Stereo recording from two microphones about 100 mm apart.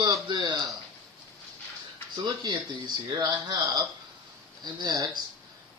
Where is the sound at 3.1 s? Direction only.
40° right (ahead or behind).